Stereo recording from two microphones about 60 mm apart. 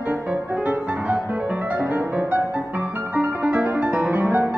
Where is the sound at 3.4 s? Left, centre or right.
Centre.